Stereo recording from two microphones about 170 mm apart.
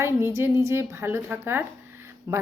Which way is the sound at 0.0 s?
15° right (ahead or behind).